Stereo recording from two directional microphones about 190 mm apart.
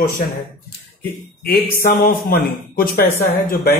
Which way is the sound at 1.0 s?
50° left (ahead or behind).